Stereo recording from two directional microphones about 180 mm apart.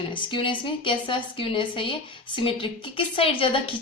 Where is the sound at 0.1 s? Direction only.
25° left (ahead or behind).